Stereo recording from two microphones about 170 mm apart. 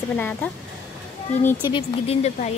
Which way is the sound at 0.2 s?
10° left (ahead or behind).